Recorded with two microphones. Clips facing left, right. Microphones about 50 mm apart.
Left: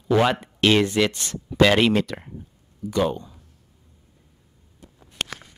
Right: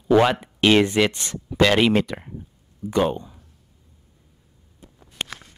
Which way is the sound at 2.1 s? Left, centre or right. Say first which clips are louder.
Right 1 dB; centre.